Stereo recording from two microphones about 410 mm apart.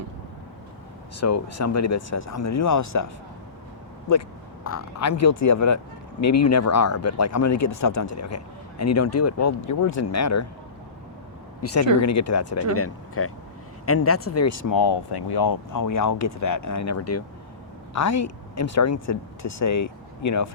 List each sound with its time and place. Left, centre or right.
1.2 s speech: left
4.6 s speech: left
11.6 s speech: left
14.7 s speech: left